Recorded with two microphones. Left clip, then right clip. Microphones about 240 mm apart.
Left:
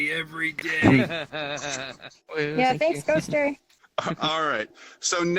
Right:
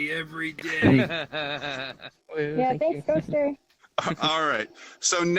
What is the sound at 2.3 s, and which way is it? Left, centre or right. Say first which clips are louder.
Speech: left 1 dB; left.